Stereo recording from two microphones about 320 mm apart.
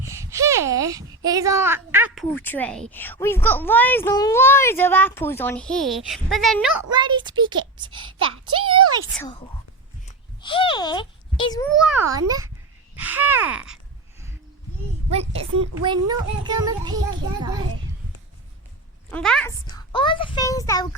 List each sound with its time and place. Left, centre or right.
0.0 s a child's voice: centre
6.9 s a child's voice: centre
8.2 s speech: right
10.1 s a sound: centre
11.7 s a child's voice: centre
15.1 s a child's voice: centre
19.1 s a child's voice: centre